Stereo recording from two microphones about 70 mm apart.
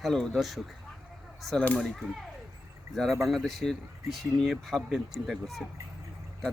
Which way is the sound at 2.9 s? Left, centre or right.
Centre.